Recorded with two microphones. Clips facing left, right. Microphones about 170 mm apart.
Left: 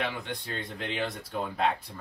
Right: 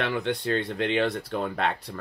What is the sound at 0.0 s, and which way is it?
Speech, 80° right.